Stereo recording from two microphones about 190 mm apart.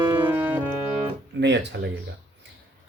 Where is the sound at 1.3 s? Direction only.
65° right (ahead or behind).